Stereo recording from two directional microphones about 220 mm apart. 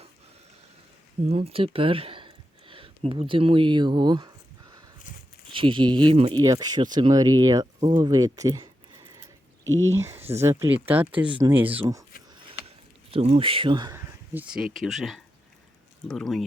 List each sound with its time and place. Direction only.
1.2 s speech: 30° right (ahead or behind)
5.5 s speech: 20° right (ahead or behind)
9.9 s speech: 10° right (ahead or behind)
13.1 s speech: 25° right (ahead or behind)
14.3 s speech: 5° right (ahead or behind)